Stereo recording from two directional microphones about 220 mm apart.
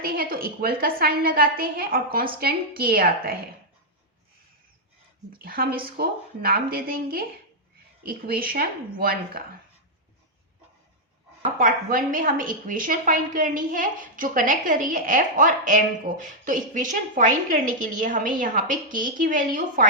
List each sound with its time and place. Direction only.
0.0 s a woman's voice: 40° right (ahead or behind)
5.4 s a woman's voice: 40° right (ahead or behind)
11.5 s a woman's voice: 40° right (ahead or behind)